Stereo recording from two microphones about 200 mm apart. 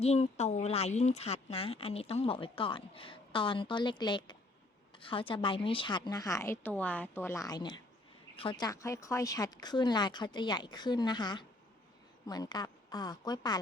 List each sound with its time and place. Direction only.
0.0 s speech: 30° left (ahead or behind)